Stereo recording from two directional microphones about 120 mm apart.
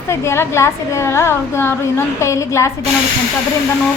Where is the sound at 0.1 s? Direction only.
25° left (ahead or behind).